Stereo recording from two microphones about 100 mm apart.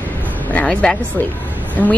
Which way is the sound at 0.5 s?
15° left (ahead or behind).